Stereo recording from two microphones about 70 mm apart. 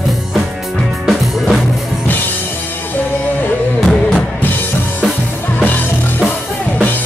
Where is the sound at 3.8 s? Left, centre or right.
Centre.